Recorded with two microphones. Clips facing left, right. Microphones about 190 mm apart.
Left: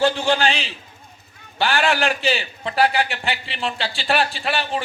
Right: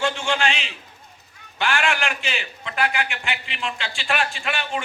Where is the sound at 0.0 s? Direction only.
35° left (ahead or behind).